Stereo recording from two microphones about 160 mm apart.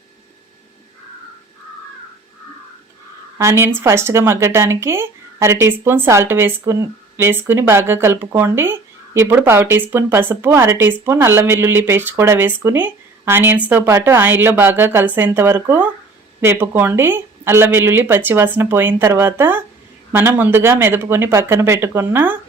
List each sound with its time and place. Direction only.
3.3 s speech: 15° right (ahead or behind)